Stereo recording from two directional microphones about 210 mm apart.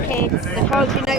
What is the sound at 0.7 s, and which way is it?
Speech, centre (ahead or behind).